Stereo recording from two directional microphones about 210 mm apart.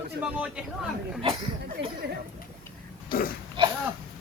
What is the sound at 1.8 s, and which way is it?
Speech, 55° right (ahead or behind).